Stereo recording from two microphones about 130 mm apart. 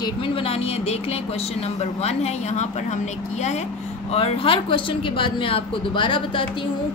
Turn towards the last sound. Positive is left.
turn(degrees=40)  # may be behind; listen again after turning